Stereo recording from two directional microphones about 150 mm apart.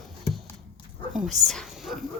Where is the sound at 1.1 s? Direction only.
5° right (ahead or behind).